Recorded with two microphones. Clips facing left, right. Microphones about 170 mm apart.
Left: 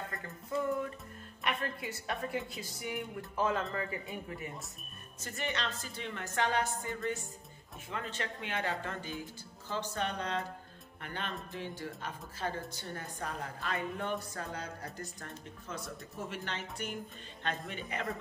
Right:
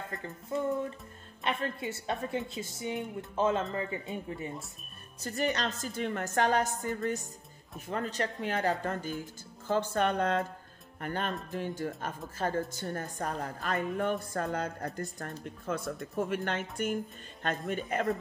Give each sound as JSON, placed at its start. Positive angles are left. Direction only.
{"t": 0.1, "sound": "a woman's voice", "side_deg": -25}
{"t": 9.2, "sound": "a woman's voice", "side_deg": -50}